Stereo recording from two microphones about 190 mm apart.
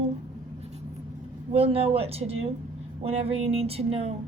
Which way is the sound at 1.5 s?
30° right (ahead or behind).